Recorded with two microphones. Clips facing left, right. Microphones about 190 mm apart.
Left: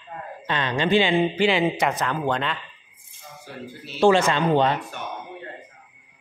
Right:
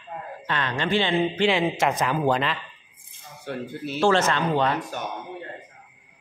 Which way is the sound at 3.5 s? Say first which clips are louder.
Right 8 dB; 65° right (ahead or behind).